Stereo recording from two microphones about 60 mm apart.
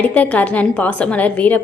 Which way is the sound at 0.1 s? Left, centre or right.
Left.